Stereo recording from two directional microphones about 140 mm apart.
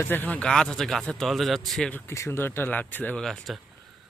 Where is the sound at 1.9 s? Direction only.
20° left (ahead or behind).